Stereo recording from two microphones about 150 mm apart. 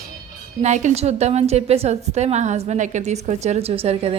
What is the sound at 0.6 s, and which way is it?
A woman's voice, 50° right (ahead or behind).